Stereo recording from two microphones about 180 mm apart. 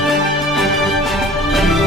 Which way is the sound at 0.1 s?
Centre (ahead or behind).